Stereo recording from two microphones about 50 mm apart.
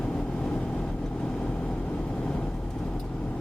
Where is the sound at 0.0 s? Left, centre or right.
Centre.